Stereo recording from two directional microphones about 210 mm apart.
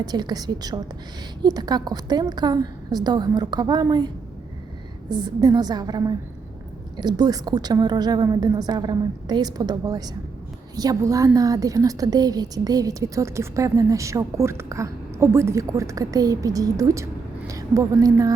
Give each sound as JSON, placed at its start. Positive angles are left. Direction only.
{"t": 0.0, "sound": "a woman's voice", "side_deg": -20}